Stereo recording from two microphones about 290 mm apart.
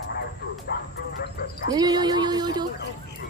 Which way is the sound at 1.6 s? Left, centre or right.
Centre.